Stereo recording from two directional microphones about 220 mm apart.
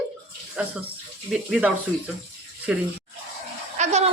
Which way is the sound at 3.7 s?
30° right (ahead or behind).